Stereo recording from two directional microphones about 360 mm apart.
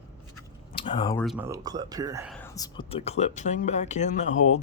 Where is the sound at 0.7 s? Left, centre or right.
Centre.